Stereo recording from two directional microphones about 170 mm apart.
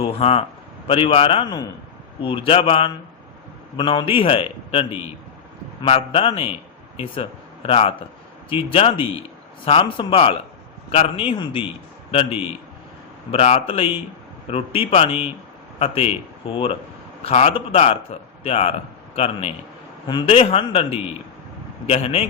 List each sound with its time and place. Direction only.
0.0 s a man's voice: 35° left (ahead or behind)
13.3 s speech: 35° left (ahead or behind)